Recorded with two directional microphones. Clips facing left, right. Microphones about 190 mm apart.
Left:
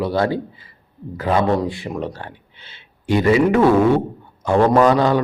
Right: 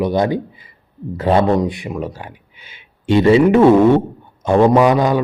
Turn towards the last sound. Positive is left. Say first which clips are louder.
# right 1 dB
turn(degrees=-15)  # may be behind; listen again after turning